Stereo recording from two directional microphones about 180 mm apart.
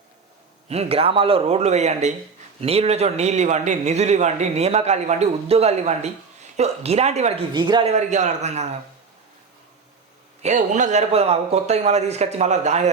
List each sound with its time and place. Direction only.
0.7 s a man's voice: 35° right (ahead or behind)
10.4 s a man's voice: 40° right (ahead or behind)